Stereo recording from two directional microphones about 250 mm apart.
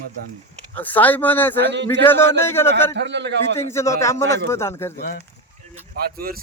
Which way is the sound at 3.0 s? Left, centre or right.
Right.